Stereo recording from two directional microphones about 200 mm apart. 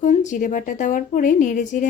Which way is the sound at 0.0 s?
35° left (ahead or behind).